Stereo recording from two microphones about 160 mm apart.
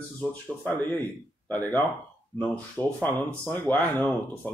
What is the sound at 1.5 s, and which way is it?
Speech, 10° left (ahead or behind).